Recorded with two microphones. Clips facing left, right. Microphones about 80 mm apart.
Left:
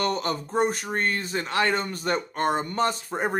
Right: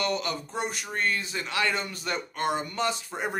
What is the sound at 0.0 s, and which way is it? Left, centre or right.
Speech, left.